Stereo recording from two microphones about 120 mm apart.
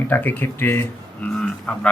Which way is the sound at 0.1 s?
15° left (ahead or behind).